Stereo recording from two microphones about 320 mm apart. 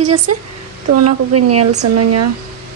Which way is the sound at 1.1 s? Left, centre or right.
Right.